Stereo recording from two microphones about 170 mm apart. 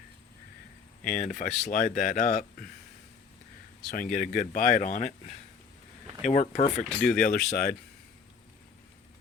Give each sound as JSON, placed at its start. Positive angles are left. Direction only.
{"t": 1.0, "sound": "speech", "side_deg": 50}
{"t": 3.9, "sound": "speech", "side_deg": 50}
{"t": 6.2, "sound": "speech", "side_deg": 45}
{"t": 7.1, "sound": "speech", "side_deg": 65}